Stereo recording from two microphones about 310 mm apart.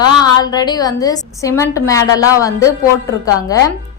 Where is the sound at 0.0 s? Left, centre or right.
Centre.